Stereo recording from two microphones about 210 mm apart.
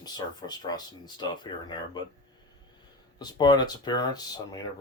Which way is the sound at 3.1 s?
20° left (ahead or behind).